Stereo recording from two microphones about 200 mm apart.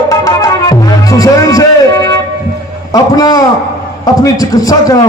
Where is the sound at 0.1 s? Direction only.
20° left (ahead or behind).